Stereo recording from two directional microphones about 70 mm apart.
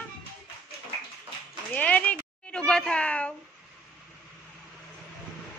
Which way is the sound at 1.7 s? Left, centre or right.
Left.